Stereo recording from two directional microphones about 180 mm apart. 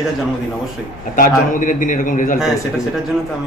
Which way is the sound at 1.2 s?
45° left (ahead or behind).